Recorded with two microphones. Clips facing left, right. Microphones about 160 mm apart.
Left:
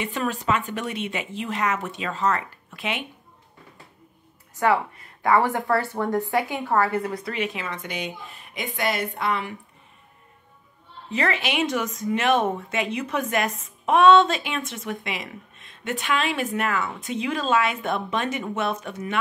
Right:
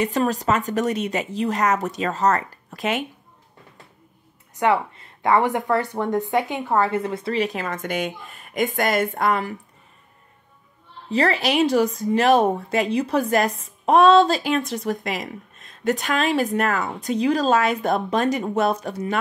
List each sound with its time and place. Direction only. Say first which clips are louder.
0.0 s speech: right 5 dB; 40° right (ahead or behind)
4.6 s speech: right 1 dB; 25° right (ahead or behind); by 9.6 s 45° right (ahead or behind)
11.1 s speech: right 5 dB; 35° right (ahead or behind)